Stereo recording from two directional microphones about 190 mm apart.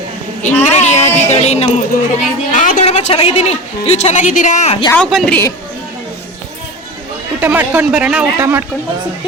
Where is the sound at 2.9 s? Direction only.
30° left (ahead or behind).